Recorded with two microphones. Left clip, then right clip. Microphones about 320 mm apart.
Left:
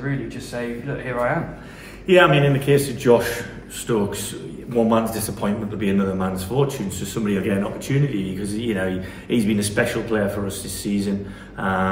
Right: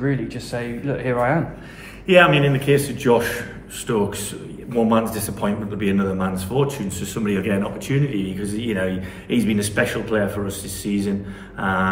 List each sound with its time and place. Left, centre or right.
0.5 s a man's voice: right
2.0 s a man's voice: centre